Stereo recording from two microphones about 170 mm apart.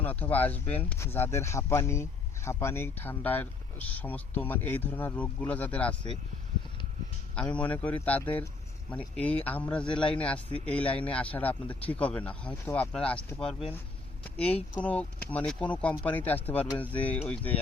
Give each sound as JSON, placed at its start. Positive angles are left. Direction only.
{"t": 0.0, "sound": "speech", "side_deg": 10}
{"t": 7.3, "sound": "speech", "side_deg": 10}
{"t": 9.8, "sound": "a man's voice", "side_deg": 30}
{"t": 10.1, "sound": "speech", "side_deg": 10}